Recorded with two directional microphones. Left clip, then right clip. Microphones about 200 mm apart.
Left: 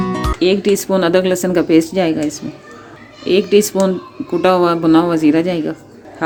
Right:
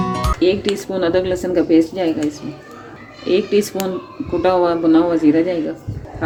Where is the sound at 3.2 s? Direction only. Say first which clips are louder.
Left 4 dB; 40° left (ahead or behind).